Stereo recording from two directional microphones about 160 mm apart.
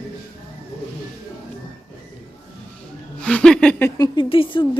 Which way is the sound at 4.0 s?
30° left (ahead or behind).